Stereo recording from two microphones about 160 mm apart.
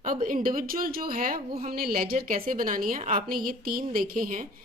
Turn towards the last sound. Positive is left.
turn(degrees=-60)  # may be behind; listen again after turning